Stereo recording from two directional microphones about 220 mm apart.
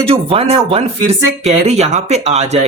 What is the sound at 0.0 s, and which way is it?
A man's voice, 25° right (ahead or behind).